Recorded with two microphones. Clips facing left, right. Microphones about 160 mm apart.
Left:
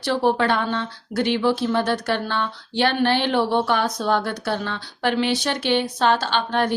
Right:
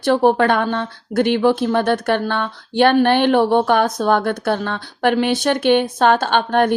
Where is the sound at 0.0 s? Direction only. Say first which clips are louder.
Right 6 dB; 50° right (ahead or behind).